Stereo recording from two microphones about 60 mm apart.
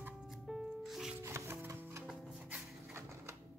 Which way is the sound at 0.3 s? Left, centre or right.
Centre.